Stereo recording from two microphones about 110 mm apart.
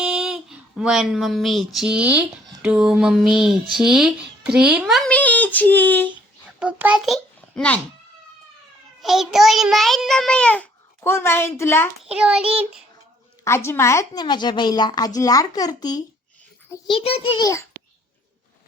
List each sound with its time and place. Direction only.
0.0 s speech: 5° right (ahead or behind)
5.0 s speech: 15° left (ahead or behind)
6.6 s child singing: 10° right (ahead or behind)
7.0 s a child's voice: 5° left (ahead or behind)
9.0 s speech: 5° right (ahead or behind)
11.0 s a woman's voice: 20° left (ahead or behind)
12.0 s child singing: 10° right (ahead or behind)
13.4 s a woman's voice: 25° left (ahead or behind)
17.0 s a child's voice: 65° left (ahead or behind)